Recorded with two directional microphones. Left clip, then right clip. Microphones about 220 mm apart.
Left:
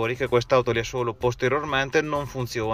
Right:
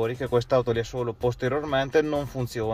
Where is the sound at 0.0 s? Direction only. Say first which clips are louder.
Left 2 dB; 10° left (ahead or behind).